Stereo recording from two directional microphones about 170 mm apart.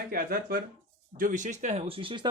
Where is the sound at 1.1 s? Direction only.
50° right (ahead or behind); by 2.2 s 30° right (ahead or behind).